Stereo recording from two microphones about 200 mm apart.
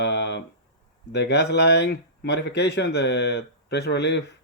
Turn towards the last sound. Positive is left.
turn(degrees=60)  # may be behind; listen again after turning